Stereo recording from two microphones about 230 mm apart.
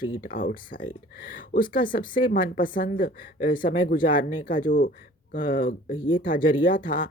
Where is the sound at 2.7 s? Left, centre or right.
Left.